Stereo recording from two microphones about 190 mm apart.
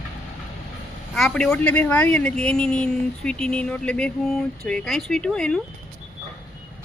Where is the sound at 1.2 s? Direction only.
Centre (ahead or behind).